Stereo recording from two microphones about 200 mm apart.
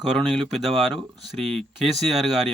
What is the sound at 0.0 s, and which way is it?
Speech, centre (ahead or behind).